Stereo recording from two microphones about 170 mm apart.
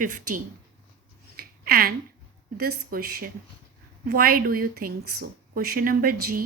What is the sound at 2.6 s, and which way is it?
Speech, 65° right (ahead or behind).